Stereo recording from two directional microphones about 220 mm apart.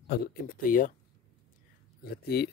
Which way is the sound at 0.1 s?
40° left (ahead or behind).